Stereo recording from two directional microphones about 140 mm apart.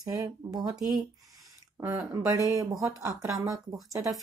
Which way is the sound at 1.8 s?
20° right (ahead or behind).